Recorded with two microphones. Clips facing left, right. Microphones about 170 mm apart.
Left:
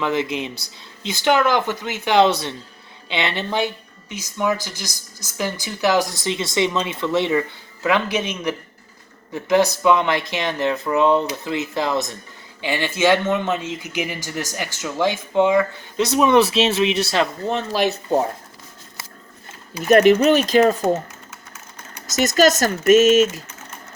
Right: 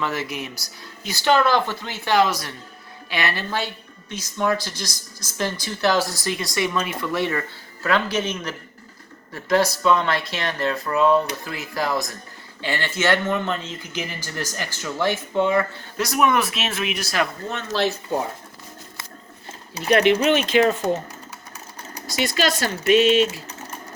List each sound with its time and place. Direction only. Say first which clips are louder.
0.0 s speech: left 5 dB; 20° left (ahead or behind)
19.9 s speech: left 4 dB; 45° left (ahead or behind)
22.1 s speech: left 7 dB; 45° left (ahead or behind)